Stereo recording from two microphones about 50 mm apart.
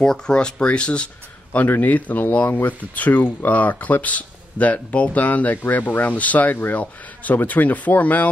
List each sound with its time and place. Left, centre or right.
0.0 s speech: centre
1.5 s speech: left